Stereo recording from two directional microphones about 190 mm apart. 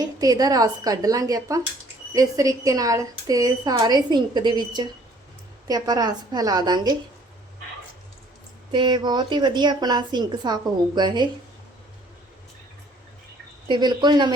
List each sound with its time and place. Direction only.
0.0 s a woman's voice: 20° right (ahead or behind)
8.7 s a woman's voice: 25° right (ahead or behind)
13.7 s a woman's voice: 20° right (ahead or behind)